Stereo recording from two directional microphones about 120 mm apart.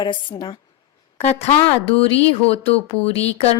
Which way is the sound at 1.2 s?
55° left (ahead or behind).